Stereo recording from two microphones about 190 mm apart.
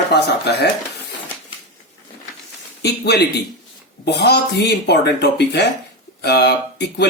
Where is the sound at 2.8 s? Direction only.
60° left (ahead or behind).